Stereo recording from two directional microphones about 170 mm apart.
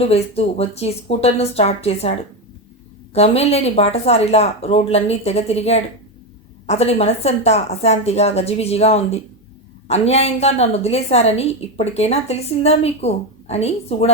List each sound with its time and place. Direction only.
0.0 s a woman's voice: 35° left (ahead or behind)